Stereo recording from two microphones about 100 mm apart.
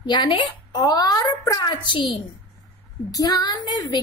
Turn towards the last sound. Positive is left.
turn(degrees=45)  # may be behind; listen again after turning